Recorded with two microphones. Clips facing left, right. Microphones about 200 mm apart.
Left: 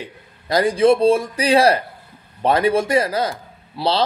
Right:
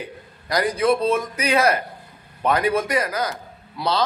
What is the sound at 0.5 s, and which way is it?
A man's voice, 25° left (ahead or behind).